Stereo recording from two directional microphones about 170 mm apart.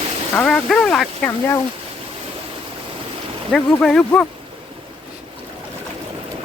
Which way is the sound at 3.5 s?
5° left (ahead or behind).